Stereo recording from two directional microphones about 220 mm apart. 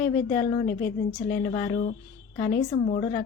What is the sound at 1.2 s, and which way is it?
A woman's voice, 40° left (ahead or behind).